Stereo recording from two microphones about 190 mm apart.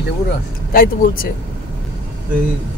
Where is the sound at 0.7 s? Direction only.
50° left (ahead or behind).